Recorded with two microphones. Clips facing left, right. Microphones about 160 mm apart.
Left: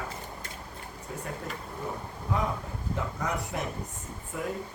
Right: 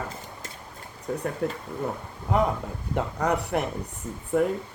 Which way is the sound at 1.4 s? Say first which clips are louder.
Right 8 dB; 70° right (ahead or behind).